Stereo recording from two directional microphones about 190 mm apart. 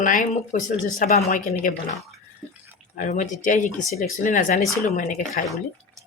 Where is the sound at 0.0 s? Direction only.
45° left (ahead or behind).